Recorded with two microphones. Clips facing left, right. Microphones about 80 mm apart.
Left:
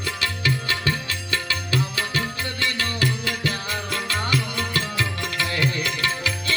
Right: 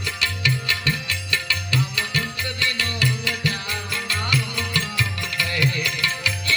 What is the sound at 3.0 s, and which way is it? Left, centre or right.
Music, left.